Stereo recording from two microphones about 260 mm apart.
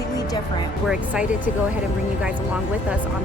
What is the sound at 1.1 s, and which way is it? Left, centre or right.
Speech, centre.